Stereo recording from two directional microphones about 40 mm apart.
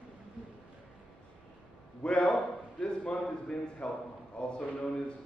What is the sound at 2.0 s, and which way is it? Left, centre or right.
A man's voice, left.